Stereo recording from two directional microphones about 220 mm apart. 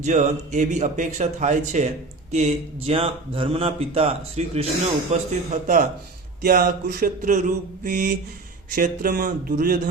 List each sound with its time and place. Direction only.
0.0 s speech: 30° right (ahead or behind)